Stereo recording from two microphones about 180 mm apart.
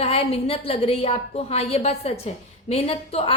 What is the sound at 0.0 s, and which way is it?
A woman's voice, 35° left (ahead or behind).